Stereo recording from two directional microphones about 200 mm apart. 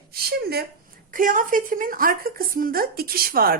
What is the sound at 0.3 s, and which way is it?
Speech, 55° right (ahead or behind).